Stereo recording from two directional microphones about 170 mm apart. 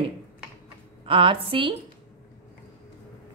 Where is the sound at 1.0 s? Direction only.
30° right (ahead or behind).